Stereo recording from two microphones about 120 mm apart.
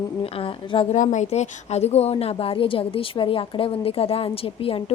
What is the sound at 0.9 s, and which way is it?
Speech, 90° left.